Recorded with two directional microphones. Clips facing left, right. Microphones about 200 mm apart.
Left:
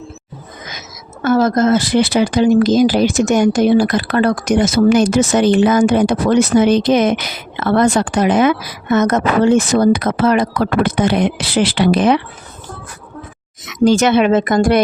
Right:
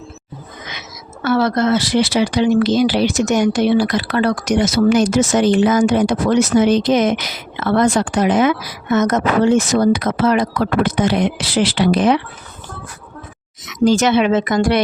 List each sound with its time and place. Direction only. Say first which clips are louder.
1.2 s speech: left 3 dB; 45° left (ahead or behind); by 12.2 s 60° left (ahead or behind)
13.7 s speech: left 2 dB; 65° left (ahead or behind)